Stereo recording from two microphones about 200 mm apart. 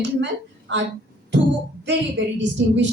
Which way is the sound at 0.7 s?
65° right (ahead or behind).